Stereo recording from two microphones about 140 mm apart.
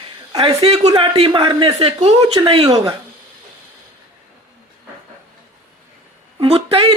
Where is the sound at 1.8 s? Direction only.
45° right (ahead or behind).